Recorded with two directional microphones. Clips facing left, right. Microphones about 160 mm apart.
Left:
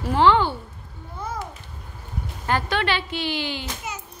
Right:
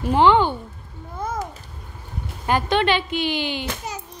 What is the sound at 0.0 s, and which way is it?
Speech, 20° right (ahead or behind).